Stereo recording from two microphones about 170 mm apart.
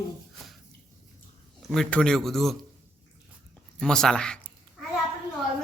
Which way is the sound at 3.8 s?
5° left (ahead or behind).